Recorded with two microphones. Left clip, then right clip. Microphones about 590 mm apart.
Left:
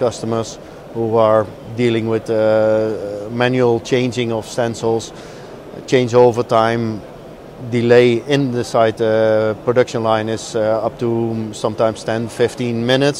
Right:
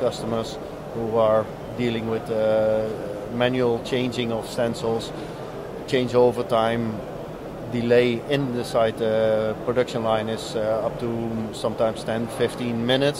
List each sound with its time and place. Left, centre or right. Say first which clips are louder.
0.0 s speech: left 6 dB; left